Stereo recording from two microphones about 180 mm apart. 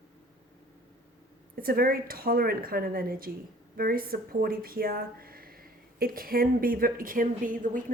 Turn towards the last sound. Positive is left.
turn(degrees=-50)  # may be behind; listen again after turning